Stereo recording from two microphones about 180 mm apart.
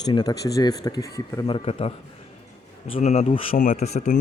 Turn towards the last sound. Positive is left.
turn(degrees=40)  # may be behind; listen again after turning